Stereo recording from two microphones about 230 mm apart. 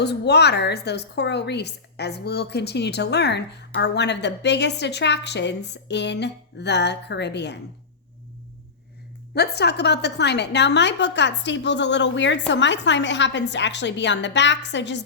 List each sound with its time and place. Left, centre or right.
0.0 s a woman's voice: left
9.3 s a woman's voice: left